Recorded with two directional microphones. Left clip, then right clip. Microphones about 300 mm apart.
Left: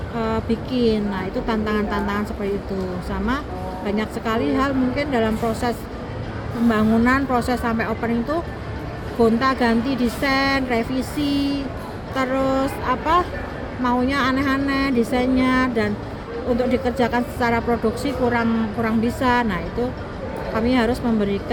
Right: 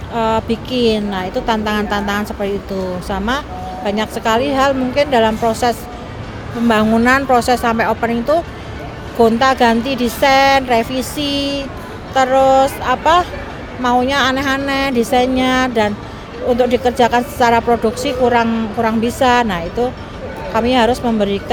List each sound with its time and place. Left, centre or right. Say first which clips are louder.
0.2 s speech: right 8 dB; right